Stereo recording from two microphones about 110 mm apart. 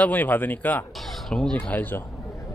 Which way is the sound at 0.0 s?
15° left (ahead or behind).